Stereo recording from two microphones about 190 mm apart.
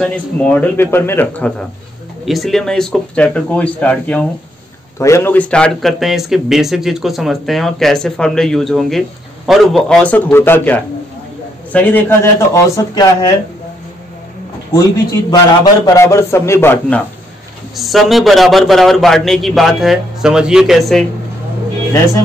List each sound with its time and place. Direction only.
0.0 s a man's voice: 10° left (ahead or behind)
12.7 s speech: 20° left (ahead or behind)
14.7 s a man's voice: 20° left (ahead or behind)
17.7 s a man's voice: centre (ahead or behind)